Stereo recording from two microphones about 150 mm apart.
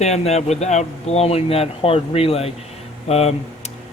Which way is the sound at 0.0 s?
45° left (ahead or behind).